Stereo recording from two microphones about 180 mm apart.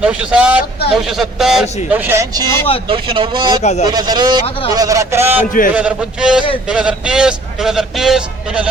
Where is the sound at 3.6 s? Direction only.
40° left (ahead or behind).